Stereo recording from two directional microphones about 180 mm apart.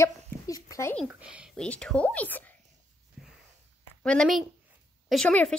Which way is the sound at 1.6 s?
5° left (ahead or behind).